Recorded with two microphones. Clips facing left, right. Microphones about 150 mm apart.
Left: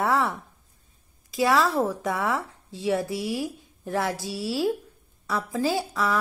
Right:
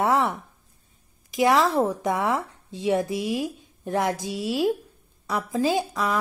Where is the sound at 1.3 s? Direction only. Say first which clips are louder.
Right 2 dB; 20° right (ahead or behind).